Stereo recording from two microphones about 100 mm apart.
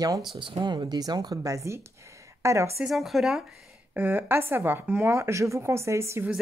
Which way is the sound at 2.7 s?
5° right (ahead or behind).